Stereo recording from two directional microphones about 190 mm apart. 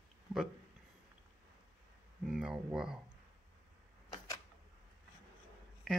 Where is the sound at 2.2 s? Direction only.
Centre (ahead or behind).